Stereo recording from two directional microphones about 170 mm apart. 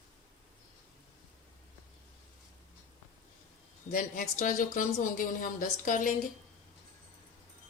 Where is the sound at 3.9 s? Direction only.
55° left (ahead or behind).